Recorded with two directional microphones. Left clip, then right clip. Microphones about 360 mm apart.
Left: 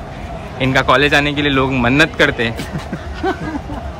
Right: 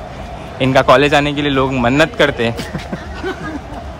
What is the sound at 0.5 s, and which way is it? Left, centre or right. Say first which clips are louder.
A man's voice: right 3 dB; centre.